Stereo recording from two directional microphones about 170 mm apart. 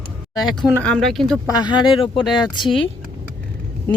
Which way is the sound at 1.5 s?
25° left (ahead or behind).